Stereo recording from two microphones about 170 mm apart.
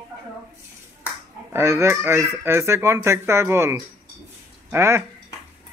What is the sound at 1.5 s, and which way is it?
Speech, 15° right (ahead or behind).